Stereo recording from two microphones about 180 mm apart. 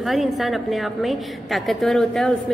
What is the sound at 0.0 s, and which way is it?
A woman's voice, centre (ahead or behind).